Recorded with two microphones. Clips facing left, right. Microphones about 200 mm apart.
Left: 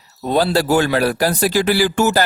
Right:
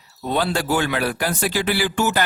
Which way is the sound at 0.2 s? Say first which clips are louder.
Left 6 dB; 40° left (ahead or behind).